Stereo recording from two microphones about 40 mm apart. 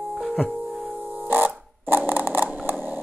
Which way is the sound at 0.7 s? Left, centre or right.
Centre.